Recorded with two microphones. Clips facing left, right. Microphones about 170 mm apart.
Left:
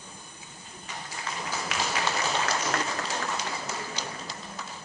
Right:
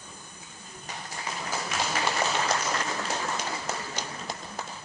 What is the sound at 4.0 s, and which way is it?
Tap, 50° right (ahead or behind).